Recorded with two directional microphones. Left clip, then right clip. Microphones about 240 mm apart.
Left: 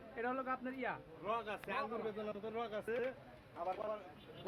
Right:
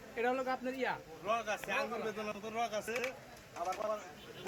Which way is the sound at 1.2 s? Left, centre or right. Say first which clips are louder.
Right 5 dB; left.